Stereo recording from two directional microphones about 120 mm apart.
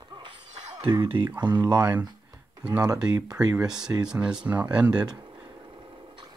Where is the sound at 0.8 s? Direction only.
45° right (ahead or behind).